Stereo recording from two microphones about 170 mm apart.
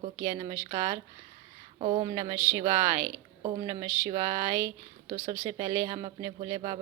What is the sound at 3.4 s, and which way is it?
Speech, 25° right (ahead or behind).